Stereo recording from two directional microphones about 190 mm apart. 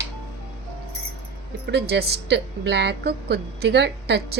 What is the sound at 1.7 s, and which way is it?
A woman's voice, 60° right (ahead or behind).